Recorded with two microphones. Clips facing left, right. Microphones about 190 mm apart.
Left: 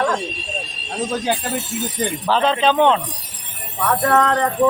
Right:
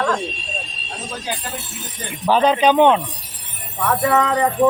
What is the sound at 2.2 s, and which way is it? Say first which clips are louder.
Speech: right 3 dB; 15° right (ahead or behind).